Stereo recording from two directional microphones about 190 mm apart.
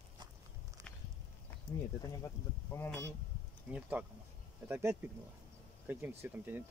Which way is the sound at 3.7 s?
5° right (ahead or behind).